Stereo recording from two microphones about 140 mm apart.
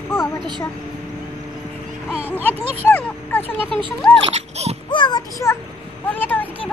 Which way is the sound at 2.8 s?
10° left (ahead or behind).